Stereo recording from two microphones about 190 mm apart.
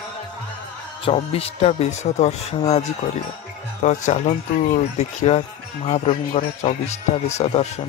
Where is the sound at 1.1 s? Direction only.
30° left (ahead or behind).